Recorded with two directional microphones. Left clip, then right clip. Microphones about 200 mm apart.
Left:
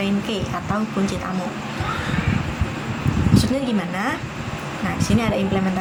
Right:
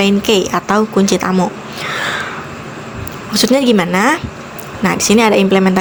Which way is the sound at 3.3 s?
55° right (ahead or behind).